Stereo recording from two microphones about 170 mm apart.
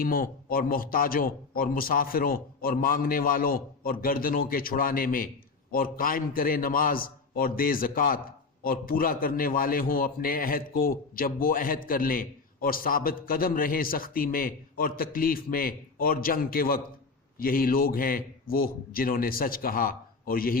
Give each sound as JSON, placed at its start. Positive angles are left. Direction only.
{"t": 0.0, "sound": "a man's voice", "side_deg": 55}